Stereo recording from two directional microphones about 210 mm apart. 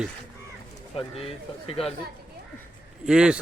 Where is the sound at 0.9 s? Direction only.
30° left (ahead or behind).